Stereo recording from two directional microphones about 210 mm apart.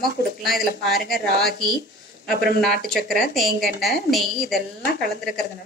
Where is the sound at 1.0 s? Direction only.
45° right (ahead or behind).